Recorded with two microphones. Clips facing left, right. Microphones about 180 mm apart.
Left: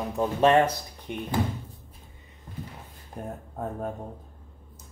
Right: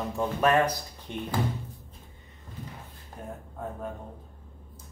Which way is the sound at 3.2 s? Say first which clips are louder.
Left 4 dB; 45° left (ahead or behind).